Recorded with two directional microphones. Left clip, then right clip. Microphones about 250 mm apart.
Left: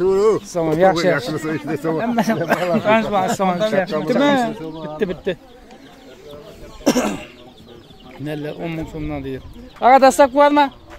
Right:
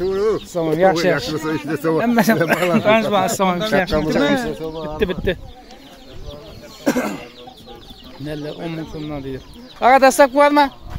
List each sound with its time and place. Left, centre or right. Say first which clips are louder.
0.0 s a sound: left 3 dB; left
0.5 s speech: even; centre
1.7 s speech: right 2 dB; centre
2.0 s speech: right 5 dB; right
4.2 s speech: left 5 dB; left
4.8 s speech: right 1 dB; centre
6.8 s bird: left 2 dB; centre
8.3 s speech: left 1 dB; centre